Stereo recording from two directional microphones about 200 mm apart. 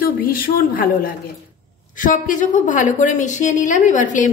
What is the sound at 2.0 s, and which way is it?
A woman's voice, 40° left (ahead or behind).